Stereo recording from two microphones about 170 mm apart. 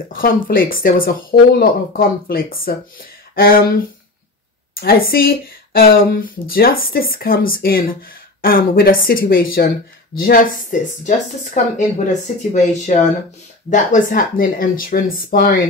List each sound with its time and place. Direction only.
0.1 s speech: 55° left (ahead or behind)
4.7 s speech: 60° left (ahead or behind)